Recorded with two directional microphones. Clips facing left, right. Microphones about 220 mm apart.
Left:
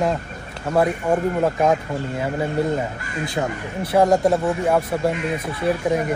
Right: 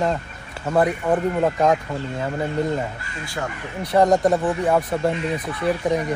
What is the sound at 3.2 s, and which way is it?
Speech, 20° left (ahead or behind).